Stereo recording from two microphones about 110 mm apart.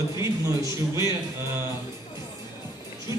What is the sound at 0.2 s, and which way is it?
Speech, 30° right (ahead or behind).